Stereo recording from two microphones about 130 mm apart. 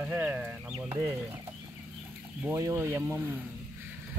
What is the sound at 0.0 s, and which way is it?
Speech, 15° right (ahead or behind).